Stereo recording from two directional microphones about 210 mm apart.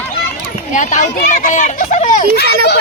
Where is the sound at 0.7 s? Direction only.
35° left (ahead or behind).